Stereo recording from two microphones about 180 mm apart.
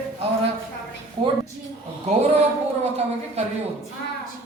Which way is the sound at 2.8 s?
35° right (ahead or behind).